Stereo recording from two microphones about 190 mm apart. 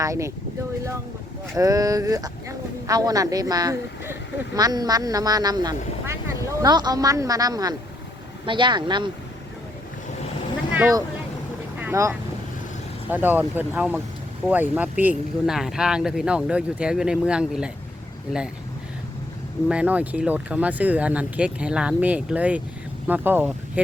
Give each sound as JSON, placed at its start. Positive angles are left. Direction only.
{"t": 0.0, "sound": "speech", "side_deg": -15}
{"t": 1.5, "sound": "speech", "side_deg": -20}
{"t": 11.8, "sound": "speech", "side_deg": -15}
{"t": 19.6, "sound": "speech", "side_deg": -5}